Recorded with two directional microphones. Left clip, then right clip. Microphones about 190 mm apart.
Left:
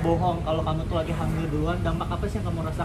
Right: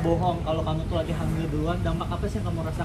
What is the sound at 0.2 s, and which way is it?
Speech, 45° left (ahead or behind).